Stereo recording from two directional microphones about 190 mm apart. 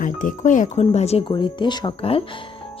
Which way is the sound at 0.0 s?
45° left (ahead or behind).